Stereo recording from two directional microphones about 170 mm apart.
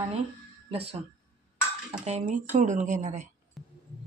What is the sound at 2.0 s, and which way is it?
A woman's voice, 45° right (ahead or behind).